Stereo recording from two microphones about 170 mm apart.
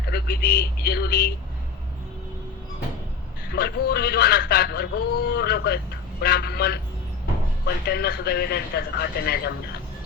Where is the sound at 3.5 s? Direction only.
65° left (ahead or behind).